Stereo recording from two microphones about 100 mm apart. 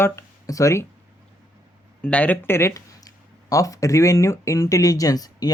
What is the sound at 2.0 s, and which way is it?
Speech, 15° left (ahead or behind).